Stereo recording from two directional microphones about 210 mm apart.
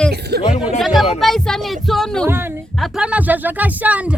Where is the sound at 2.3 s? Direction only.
10° right (ahead or behind).